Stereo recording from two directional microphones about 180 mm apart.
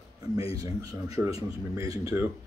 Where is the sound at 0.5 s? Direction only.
20° right (ahead or behind).